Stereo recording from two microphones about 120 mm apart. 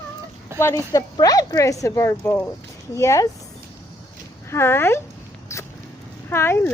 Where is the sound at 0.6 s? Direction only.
20° left (ahead or behind).